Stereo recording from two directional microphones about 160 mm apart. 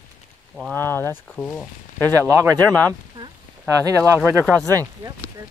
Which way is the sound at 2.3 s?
20° right (ahead or behind).